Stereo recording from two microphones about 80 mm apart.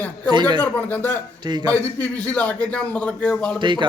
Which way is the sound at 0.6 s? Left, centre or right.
Left.